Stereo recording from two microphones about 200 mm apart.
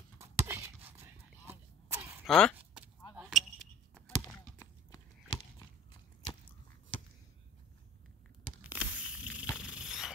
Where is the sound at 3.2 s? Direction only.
Centre (ahead or behind).